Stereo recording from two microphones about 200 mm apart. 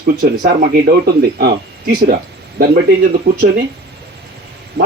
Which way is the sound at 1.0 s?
50° right (ahead or behind).